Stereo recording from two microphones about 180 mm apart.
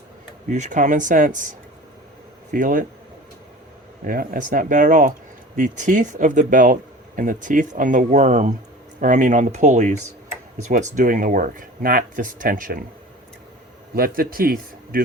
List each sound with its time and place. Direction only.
0.4 s speech: 45° right (ahead or behind)
4.0 s speech: 50° right (ahead or behind)
13.9 s a man's voice: 55° right (ahead or behind)